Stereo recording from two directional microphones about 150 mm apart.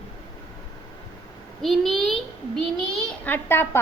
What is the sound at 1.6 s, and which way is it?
A child's voice, centre (ahead or behind).